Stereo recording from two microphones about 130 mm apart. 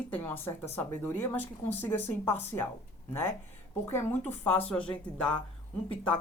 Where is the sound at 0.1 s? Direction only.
15° left (ahead or behind).